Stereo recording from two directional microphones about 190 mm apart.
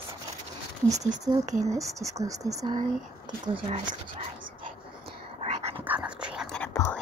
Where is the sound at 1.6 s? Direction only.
15° right (ahead or behind).